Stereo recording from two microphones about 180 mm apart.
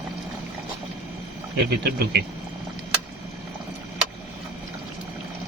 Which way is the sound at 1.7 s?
60° right (ahead or behind).